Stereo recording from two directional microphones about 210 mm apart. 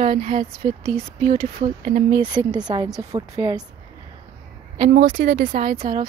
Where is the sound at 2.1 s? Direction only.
20° right (ahead or behind).